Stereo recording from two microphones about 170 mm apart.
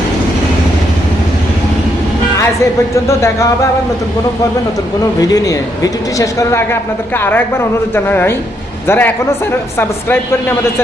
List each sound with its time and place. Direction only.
2.9 s speech: 15° left (ahead or behind)
5.2 s speech: 20° left (ahead or behind)